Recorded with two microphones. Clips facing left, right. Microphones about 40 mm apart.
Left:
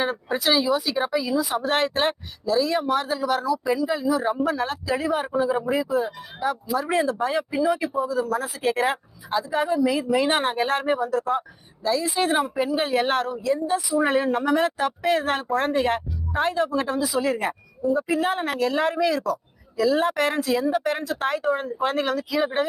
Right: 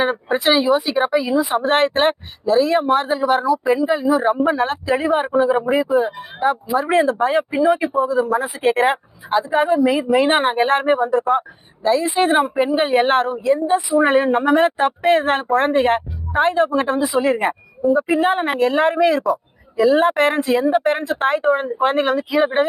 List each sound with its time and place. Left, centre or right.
0.0 s a woman's voice: right